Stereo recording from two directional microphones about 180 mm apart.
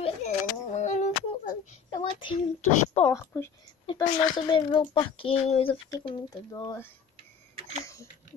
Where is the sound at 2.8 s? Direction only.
35° left (ahead or behind).